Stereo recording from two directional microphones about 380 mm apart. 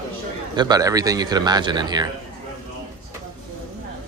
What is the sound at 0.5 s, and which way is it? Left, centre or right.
A man's voice, centre.